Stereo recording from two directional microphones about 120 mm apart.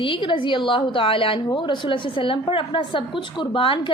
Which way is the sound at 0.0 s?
45° left (ahead or behind).